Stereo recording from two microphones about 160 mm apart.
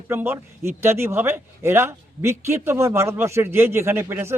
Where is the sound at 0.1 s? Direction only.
15° right (ahead or behind).